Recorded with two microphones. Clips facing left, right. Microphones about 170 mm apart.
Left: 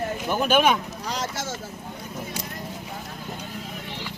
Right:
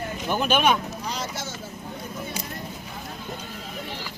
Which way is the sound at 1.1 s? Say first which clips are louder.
Left 4 dB; 90° left.